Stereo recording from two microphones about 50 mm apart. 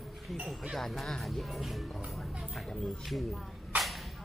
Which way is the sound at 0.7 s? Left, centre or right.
Centre.